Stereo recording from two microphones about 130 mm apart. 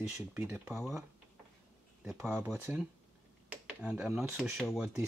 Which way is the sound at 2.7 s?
15° right (ahead or behind).